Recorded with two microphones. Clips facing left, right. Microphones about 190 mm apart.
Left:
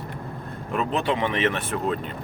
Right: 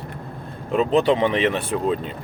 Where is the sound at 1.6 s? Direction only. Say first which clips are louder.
Right 4 dB; 15° right (ahead or behind).